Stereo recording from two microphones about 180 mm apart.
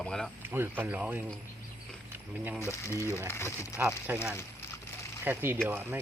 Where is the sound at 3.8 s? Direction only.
10° right (ahead or behind).